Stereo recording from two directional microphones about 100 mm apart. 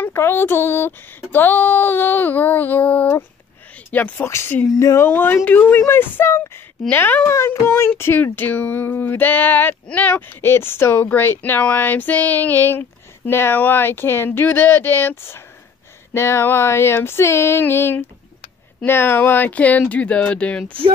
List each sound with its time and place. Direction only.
0.0 s speech: 25° left (ahead or behind)
4.3 s speech: 25° left (ahead or behind)